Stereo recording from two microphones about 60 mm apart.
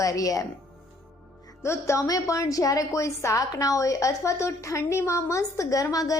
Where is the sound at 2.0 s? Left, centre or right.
Left.